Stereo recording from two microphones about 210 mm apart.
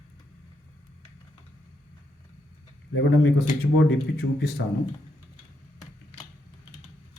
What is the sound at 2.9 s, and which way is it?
Speech, 60° left (ahead or behind).